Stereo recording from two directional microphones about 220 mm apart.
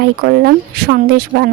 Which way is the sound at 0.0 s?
45° right (ahead or behind).